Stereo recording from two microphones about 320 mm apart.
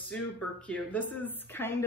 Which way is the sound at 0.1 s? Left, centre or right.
Centre.